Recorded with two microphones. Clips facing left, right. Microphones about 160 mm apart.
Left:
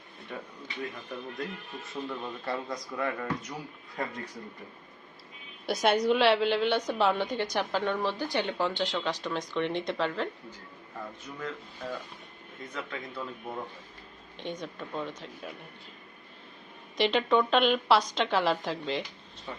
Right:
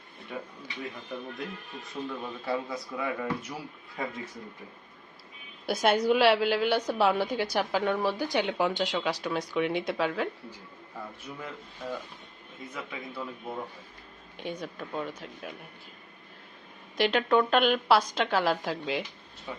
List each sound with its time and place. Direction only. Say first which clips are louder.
0.3 s speech: right 1 dB; 5° right (ahead or behind)
5.6 s a woman's voice: right 1 dB; centre (ahead or behind)
14.3 s speech: right 1 dB; 5° right (ahead or behind)
17.0 s speech: right 1 dB; centre (ahead or behind)